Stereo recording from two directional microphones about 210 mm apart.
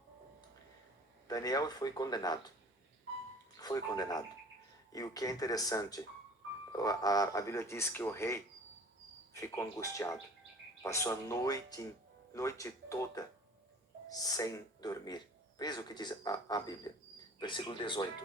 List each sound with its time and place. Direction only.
1.3 s speech: 15° left (ahead or behind)
3.6 s speech: 20° left (ahead or behind)